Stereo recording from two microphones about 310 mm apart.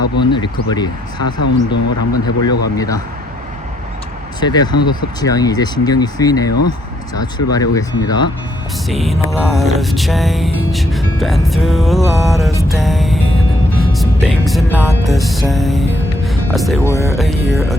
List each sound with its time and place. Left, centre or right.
0.2 s speech: centre
1.4 s speech: left
2.2 s speech: centre
4.4 s speech: centre
7.5 s speech: centre
8.9 s music: centre